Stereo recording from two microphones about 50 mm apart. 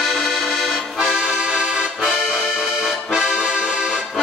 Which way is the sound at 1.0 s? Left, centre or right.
Centre.